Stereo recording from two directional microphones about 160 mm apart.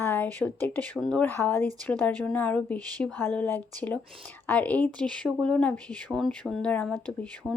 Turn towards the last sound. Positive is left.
turn(degrees=-10)  # may be behind; listen again after turning